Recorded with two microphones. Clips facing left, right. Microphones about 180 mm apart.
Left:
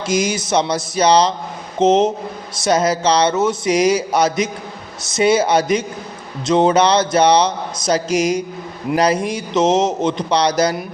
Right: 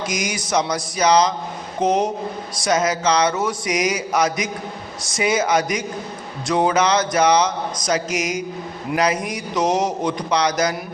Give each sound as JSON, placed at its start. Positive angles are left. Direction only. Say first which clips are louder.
{"t": 0.1, "sound": "mantra", "louder": "left 8 dB", "side_deg": 25}
{"t": 2.6, "sound": "a man's voice", "louder": "left 3 dB", "side_deg": 30}
{"t": 5.1, "sound": "mantra", "louder": "left 5 dB", "side_deg": 30}
{"t": 6.5, "sound": "a man's voice", "louder": "left 4 dB", "side_deg": 25}
{"t": 9.0, "sound": "mantra", "louder": "left 4 dB", "side_deg": 30}